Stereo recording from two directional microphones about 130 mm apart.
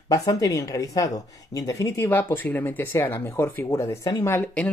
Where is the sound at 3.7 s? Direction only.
30° left (ahead or behind).